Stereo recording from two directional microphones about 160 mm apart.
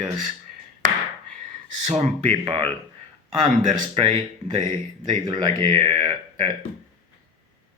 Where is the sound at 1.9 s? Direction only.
45° right (ahead or behind).